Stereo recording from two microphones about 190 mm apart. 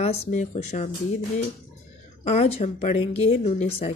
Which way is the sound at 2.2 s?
35° left (ahead or behind).